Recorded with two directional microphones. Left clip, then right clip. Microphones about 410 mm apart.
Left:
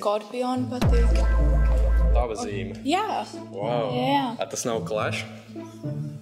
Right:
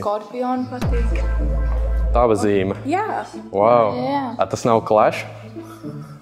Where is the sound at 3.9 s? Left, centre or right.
Left.